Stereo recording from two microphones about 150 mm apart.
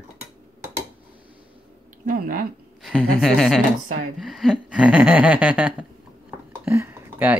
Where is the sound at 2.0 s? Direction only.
70° right (ahead or behind).